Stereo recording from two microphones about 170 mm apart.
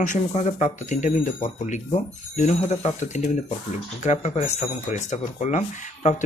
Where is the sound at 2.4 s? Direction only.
40° left (ahead or behind).